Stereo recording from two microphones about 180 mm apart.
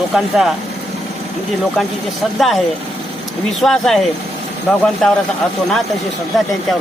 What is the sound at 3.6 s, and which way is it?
Speech, centre (ahead or behind).